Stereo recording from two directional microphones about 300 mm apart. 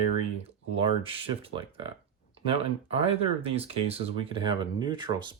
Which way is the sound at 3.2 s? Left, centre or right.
Centre.